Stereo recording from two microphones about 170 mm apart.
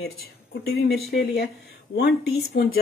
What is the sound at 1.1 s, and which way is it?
Speech, 75° left (ahead or behind).